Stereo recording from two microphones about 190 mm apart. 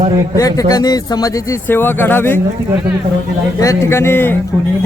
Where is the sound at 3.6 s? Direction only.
15° left (ahead or behind).